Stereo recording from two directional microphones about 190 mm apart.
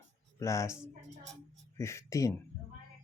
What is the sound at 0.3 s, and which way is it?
Speech, 15° left (ahead or behind).